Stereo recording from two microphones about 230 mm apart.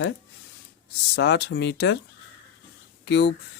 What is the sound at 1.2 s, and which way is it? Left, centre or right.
Speech, left.